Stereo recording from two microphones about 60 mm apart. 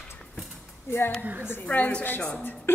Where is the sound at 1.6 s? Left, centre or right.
Left.